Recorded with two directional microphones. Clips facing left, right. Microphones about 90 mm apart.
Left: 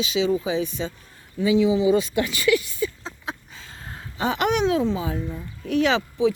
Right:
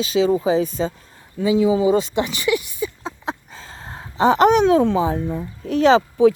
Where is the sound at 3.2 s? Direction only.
35° right (ahead or behind).